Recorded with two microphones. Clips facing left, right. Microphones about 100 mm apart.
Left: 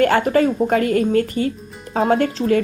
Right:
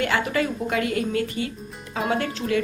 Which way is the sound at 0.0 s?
45° left (ahead or behind).